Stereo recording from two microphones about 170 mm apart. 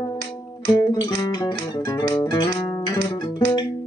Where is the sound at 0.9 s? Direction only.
25° left (ahead or behind).